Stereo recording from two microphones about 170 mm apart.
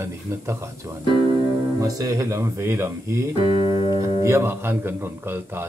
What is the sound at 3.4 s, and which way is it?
Speech, 30° right (ahead or behind).